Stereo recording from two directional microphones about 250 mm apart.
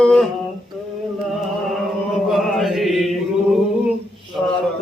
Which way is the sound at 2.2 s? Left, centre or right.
Centre.